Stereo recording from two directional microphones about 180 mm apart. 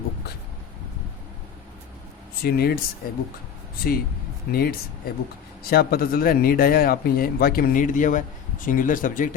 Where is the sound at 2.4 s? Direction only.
60° left (ahead or behind).